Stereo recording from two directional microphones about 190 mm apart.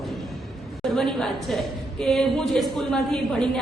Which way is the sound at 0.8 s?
Centre (ahead or behind).